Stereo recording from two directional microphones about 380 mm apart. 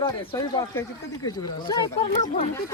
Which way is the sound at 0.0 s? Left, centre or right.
Centre.